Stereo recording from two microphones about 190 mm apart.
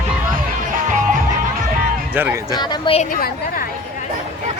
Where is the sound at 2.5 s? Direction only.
25° left (ahead or behind).